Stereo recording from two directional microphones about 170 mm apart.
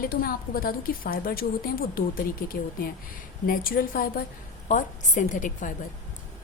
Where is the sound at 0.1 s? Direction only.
60° left (ahead or behind).